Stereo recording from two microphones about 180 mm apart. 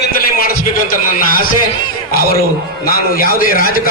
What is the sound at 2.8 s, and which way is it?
Speech, 55° left (ahead or behind).